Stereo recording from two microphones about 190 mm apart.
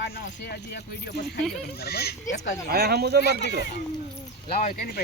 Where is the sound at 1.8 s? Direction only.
55° left (ahead or behind).